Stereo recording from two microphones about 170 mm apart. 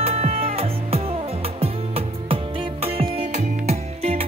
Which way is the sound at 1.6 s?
35° right (ahead or behind).